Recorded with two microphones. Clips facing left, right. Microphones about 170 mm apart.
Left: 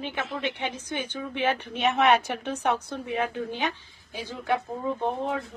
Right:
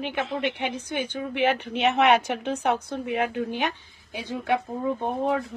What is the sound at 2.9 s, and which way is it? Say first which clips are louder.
Speech: right 2 dB; 15° right (ahead or behind).